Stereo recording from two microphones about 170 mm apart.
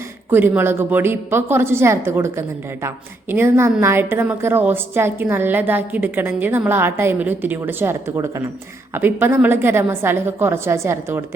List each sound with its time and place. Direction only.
0.3 s a woman's voice: 10° right (ahead or behind)